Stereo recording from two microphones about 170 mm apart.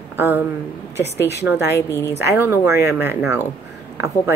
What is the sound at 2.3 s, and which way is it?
A woman's voice, 15° right (ahead or behind).